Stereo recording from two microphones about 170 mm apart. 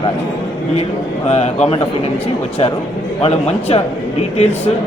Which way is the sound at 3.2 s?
35° left (ahead or behind).